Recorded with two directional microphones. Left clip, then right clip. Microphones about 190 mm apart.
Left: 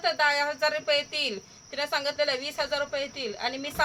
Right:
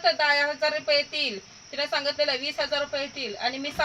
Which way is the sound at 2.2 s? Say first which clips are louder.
Right 2 dB; 30° left (ahead or behind).